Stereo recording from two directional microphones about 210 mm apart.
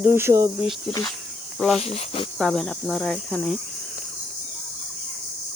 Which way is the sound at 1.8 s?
30° left (ahead or behind).